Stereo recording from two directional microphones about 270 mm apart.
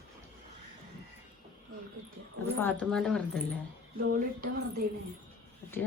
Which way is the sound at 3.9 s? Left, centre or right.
Right.